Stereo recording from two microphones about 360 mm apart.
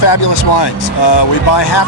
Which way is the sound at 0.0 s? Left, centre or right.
Left.